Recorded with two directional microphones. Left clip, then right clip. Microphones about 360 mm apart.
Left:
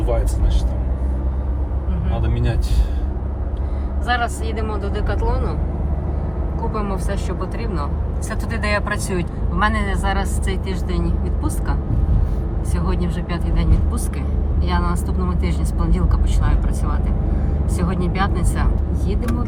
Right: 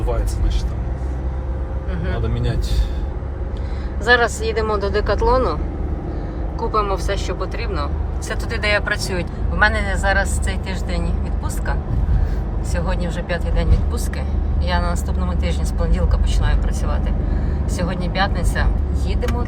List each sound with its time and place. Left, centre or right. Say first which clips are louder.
4.0 s speech: right 6 dB; centre
6.6 s speech: right 6 dB; centre